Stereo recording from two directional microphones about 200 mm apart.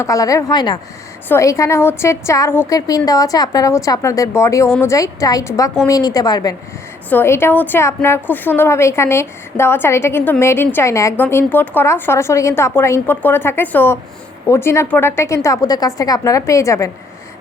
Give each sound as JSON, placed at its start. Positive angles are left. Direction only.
{"t": 0.0, "sound": "a woman's voice", "side_deg": 15}